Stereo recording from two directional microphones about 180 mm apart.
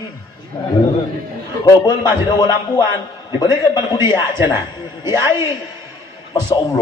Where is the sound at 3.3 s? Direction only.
20° left (ahead or behind).